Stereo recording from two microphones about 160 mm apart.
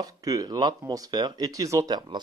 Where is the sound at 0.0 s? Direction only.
20° right (ahead or behind).